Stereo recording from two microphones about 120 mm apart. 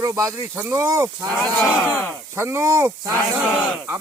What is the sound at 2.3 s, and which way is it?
Speech, 20° right (ahead or behind).